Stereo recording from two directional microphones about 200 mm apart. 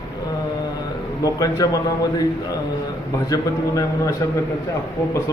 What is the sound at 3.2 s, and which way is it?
Speech, 15° left (ahead or behind).